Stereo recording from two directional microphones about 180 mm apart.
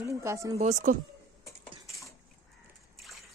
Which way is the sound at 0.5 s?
40° right (ahead or behind).